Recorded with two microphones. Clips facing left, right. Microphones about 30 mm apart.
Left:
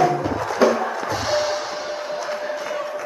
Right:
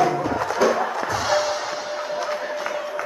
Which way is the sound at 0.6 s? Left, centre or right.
Left.